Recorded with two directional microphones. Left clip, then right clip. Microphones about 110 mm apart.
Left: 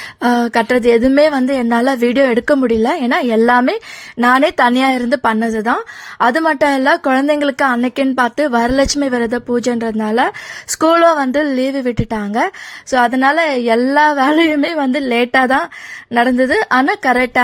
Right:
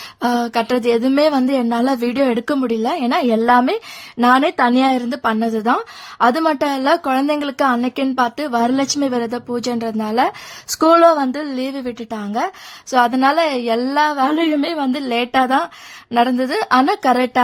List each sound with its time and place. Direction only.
0.2 s a woman's voice: 30° left (ahead or behind)
10.8 s a woman's voice: 40° left (ahead or behind)